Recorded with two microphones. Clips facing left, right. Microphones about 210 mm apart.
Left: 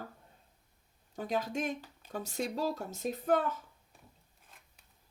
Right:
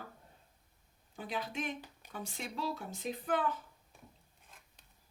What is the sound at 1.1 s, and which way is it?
Speech, 40° left (ahead or behind).